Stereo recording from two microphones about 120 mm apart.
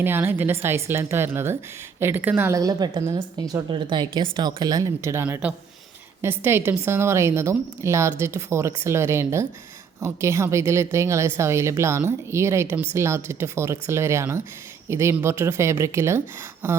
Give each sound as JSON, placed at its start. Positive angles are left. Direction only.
{"t": 0.0, "sound": "speech", "side_deg": -20}
{"t": 2.6, "sound": "speech", "side_deg": -30}